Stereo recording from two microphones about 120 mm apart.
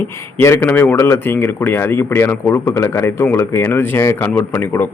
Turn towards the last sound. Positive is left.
turn(degrees=15)  # may be behind; listen again after turning